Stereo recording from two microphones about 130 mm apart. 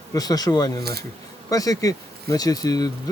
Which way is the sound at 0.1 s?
30° left (ahead or behind).